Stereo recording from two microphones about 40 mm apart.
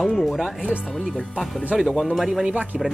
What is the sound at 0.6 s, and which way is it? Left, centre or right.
Speech, right.